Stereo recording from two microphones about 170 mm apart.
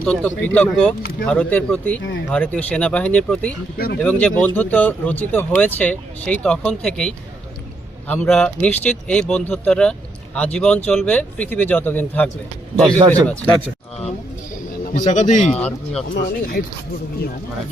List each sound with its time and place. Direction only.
0.0 s speech: 5° left (ahead or behind)
2.0 s speech: 90° left
2.3 s speech: 10° left (ahead or behind)
14.9 s speech: 45° left (ahead or behind)
15.6 s speech: 5° left (ahead or behind)
16.1 s speech: 65° left (ahead or behind)